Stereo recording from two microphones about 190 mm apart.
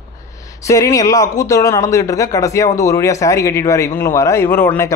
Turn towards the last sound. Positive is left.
turn(degrees=10)  # may be behind; listen again after turning